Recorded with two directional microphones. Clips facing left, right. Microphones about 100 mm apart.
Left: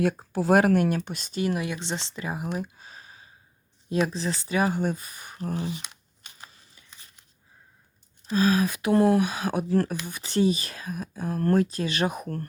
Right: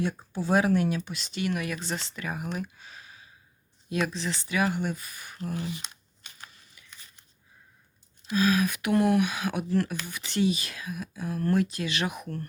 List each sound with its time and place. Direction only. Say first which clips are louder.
0.0 s speech: left 5 dB; 80° left; by 1.4 s 45° left (ahead or behind)
1.4 s speech: left 3 dB; 30° left (ahead or behind)
2.6 s a sound: left 2 dB; 35° left (ahead or behind)
4.0 s speech: left 2 dB; 35° left (ahead or behind)
8.3 s speech: left 2 dB; 35° left (ahead or behind)